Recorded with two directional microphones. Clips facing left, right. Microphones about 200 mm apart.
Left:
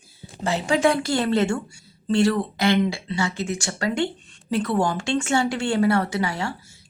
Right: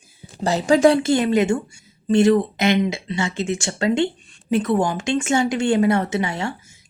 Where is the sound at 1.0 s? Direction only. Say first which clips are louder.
Right 4 dB; 15° right (ahead or behind).